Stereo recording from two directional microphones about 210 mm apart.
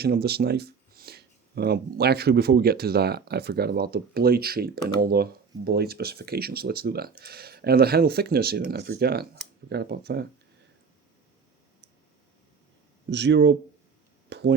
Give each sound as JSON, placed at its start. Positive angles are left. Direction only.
{"t": 0.0, "sound": "speech", "side_deg": -50}
{"t": 13.1, "sound": "speech", "side_deg": -55}
{"t": 14.3, "sound": "a sound", "side_deg": -55}